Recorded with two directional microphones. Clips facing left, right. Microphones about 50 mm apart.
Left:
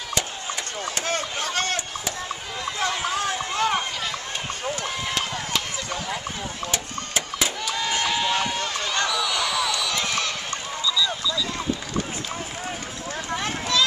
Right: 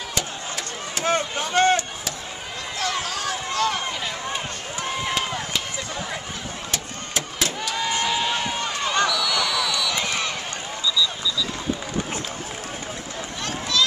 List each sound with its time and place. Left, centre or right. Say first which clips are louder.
1.0 s chop: right 7 dB; centre
2.9 s run: left 1 dB; centre
4.8 s run: right 2 dB; centre
6.7 s printer: even; centre
8.0 s run: left 2 dB; centre
9.1 s basketball bounce: right 1 dB; centre
9.9 s a sound: even; centre
13.4 s a sound: right 1 dB; centre